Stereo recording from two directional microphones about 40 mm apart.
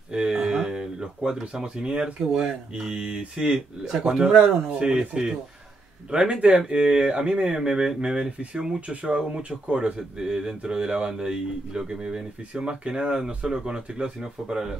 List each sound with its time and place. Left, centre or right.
0.1 s a sound: centre
0.7 s music: centre
1.4 s speech: right
3.0 s speech: right
3.5 s speech: centre
4.1 s speech: centre